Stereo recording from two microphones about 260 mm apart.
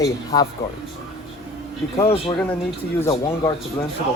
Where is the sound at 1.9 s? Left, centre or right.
Centre.